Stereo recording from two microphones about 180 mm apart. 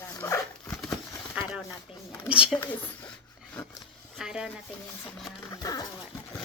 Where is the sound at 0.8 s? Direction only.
Centre (ahead or behind).